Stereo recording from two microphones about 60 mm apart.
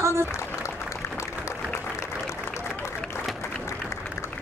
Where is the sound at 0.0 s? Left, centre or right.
Right.